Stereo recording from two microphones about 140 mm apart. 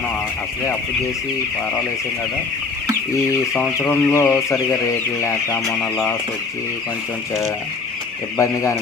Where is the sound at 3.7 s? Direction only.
20° left (ahead or behind).